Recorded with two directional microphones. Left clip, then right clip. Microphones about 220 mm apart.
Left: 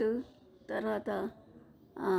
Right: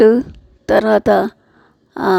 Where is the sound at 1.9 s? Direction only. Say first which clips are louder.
Right 17 dB; 45° right (ahead or behind).